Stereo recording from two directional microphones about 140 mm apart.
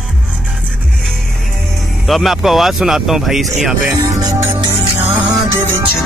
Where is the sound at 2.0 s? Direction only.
Centre (ahead or behind).